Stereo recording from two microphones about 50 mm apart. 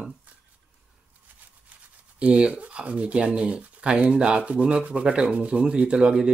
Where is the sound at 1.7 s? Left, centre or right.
Right.